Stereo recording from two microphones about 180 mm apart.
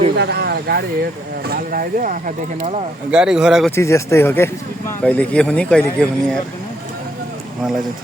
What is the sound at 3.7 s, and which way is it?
Speech, 15° left (ahead or behind).